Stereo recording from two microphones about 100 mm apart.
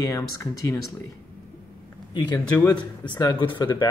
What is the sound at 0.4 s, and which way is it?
Speech, 30° left (ahead or behind).